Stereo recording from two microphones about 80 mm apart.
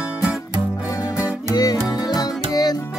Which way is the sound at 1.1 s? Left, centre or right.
Left.